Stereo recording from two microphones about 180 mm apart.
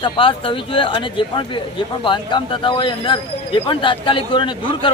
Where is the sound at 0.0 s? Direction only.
30° left (ahead or behind).